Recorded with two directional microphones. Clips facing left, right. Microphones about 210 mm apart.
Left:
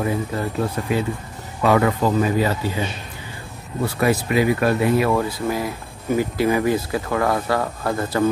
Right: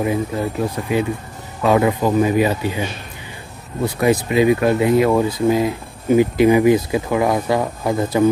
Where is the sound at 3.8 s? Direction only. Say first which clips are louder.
Right 3 dB; 15° right (ahead or behind).